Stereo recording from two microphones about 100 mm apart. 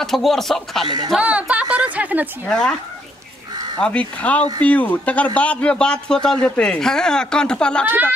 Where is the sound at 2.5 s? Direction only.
5° left (ahead or behind).